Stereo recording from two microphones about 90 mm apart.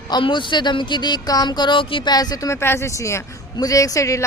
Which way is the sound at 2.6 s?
30° left (ahead or behind).